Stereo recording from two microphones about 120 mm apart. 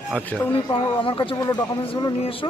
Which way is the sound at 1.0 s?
45° left (ahead or behind).